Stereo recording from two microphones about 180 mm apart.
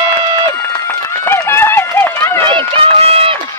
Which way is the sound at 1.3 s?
15° left (ahead or behind).